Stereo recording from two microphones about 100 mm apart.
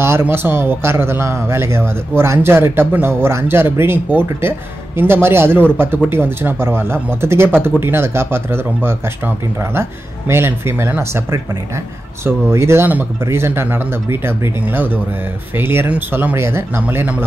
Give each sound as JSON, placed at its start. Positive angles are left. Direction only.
{"t": 0.0, "sound": "speech", "side_deg": -25}